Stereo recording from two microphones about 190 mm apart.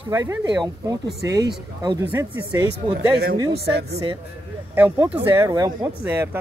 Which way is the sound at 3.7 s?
55° right (ahead or behind).